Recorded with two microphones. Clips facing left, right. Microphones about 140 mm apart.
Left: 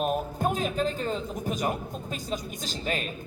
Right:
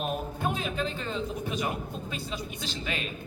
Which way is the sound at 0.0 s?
40° left (ahead or behind).